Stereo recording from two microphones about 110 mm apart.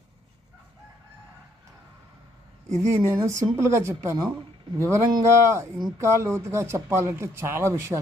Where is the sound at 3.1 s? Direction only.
25° right (ahead or behind).